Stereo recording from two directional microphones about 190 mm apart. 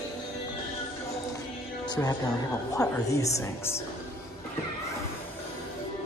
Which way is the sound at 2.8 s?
20° left (ahead or behind).